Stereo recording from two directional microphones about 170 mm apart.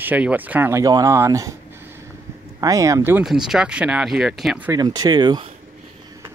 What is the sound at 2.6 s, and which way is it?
Speech, 20° right (ahead or behind).